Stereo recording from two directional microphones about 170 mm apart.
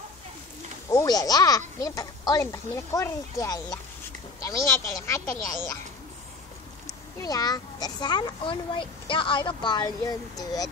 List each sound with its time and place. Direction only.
0.8 s a child's voice: 20° left (ahead or behind)
6.9 s a child's voice: 20° left (ahead or behind)